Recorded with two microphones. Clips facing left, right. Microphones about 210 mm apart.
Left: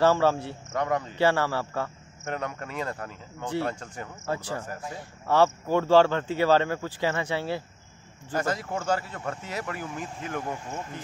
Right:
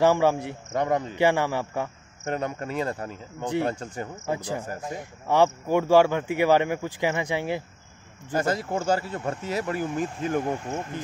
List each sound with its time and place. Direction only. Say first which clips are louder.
0.0 s speech: right 1 dB; 15° right (ahead or behind)
0.7 s speech: right 3 dB; 30° right (ahead or behind)
1.1 s speech: even; 15° right (ahead or behind)
2.2 s speech: right 4 dB; 30° right (ahead or behind)
3.8 s speech: right 5 dB; 30° right (ahead or behind)
4.3 s speech: right 1 dB; 15° right (ahead or behind)
8.4 s speech: right 3 dB; 30° right (ahead or behind)
10.4 s speech: right 6 dB; 20° right (ahead or behind)